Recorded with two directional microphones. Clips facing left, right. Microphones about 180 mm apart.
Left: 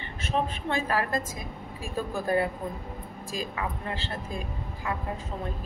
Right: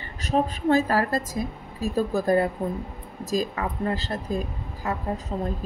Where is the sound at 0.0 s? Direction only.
40° right (ahead or behind).